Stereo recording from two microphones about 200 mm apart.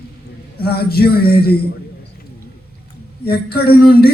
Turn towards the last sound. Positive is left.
turn(degrees=50)  # may be behind; listen again after turning